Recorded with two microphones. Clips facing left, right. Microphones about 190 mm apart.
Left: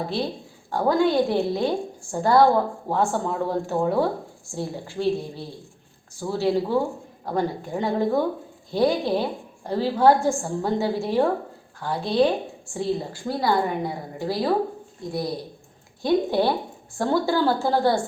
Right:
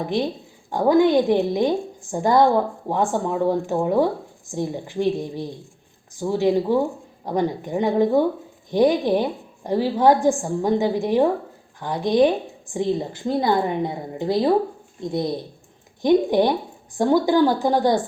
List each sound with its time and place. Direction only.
0.0 s a woman's voice: 15° right (ahead or behind)